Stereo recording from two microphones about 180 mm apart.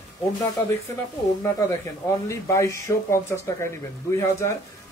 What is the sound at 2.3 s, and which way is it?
A man's voice, 15° left (ahead or behind).